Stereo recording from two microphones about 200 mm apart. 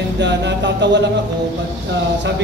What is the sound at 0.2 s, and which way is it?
A man's voice, 60° right (ahead or behind).